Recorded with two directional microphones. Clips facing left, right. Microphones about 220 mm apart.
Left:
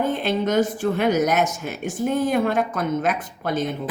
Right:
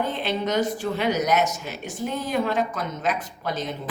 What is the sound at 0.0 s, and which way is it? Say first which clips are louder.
A woman's voice: left 4 dB; 50° left (ahead or behind).